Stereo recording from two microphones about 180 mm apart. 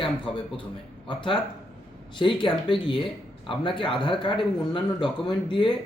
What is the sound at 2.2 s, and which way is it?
Speech, 25° left (ahead or behind).